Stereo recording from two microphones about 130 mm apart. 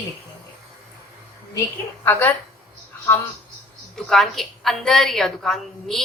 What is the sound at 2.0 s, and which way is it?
Speech, 15° left (ahead or behind).